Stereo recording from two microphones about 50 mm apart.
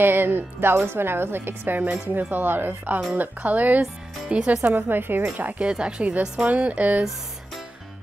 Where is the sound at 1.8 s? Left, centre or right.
Right.